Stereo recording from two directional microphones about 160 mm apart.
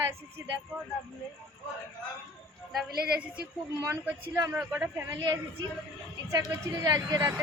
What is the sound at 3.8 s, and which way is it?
Speech, 15° right (ahead or behind).